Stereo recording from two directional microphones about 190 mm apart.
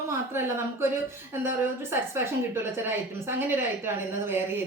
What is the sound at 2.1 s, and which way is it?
A woman's voice, 10° right (ahead or behind).